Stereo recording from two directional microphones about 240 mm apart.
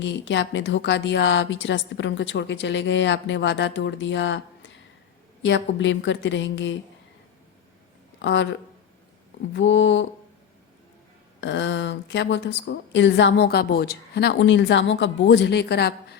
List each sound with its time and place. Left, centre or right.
0.0 s a woman's voice: left
8.2 s a woman's voice: left
9.5 s a woman's voice: left
11.3 s a woman's voice: left